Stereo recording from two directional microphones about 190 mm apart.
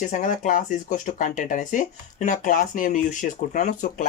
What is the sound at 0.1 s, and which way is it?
Speech, 40° left (ahead or behind).